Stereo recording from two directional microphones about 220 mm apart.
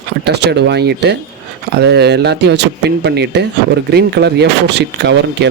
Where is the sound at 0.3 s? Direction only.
50° right (ahead or behind).